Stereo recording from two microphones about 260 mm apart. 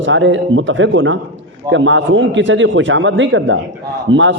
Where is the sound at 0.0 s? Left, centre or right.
Right.